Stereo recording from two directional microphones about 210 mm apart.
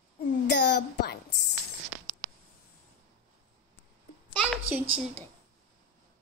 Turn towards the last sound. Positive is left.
turn(degrees=-10)  # may be behind; listen again after turning